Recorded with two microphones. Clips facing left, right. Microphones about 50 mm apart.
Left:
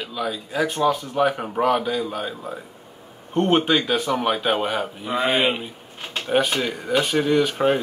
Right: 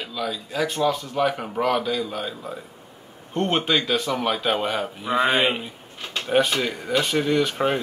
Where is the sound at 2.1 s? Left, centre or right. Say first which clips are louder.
Left 2 dB; centre.